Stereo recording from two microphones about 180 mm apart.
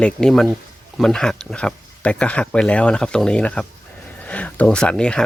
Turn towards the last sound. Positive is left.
turn(degrees=5)  # may be behind; listen again after turning